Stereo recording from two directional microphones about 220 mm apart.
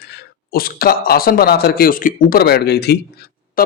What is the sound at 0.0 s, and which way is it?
Speech, 45° left (ahead or behind).